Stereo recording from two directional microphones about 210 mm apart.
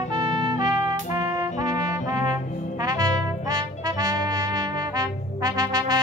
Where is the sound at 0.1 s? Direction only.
20° right (ahead or behind).